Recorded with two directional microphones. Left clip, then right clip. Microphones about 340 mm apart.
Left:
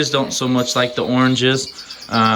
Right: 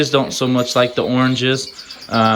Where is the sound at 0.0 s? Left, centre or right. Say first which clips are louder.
Right 2 dB; centre.